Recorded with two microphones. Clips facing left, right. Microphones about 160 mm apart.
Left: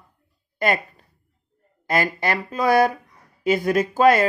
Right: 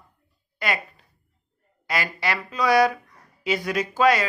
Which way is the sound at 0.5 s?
50° left (ahead or behind).